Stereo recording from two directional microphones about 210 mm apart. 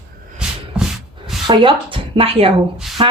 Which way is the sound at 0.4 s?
5° right (ahead or behind).